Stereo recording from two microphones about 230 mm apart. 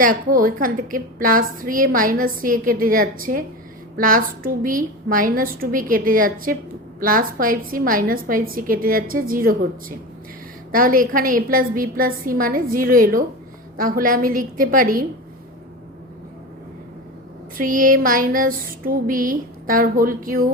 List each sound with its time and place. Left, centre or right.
0.0 s a woman's voice: right
10.7 s a woman's voice: right
17.6 s a woman's voice: right